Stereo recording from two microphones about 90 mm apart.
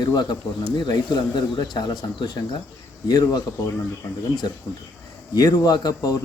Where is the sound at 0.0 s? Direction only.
55° left (ahead or behind).